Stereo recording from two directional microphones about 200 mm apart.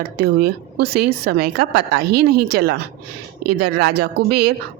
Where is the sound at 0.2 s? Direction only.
50° right (ahead or behind).